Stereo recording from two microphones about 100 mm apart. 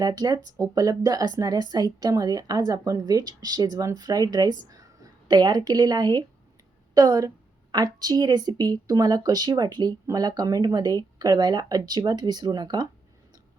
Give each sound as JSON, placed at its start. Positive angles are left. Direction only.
{"t": 0.0, "sound": "a woman's voice", "side_deg": -40}